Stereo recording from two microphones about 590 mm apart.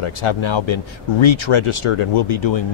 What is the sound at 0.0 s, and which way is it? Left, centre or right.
A man's voice, left.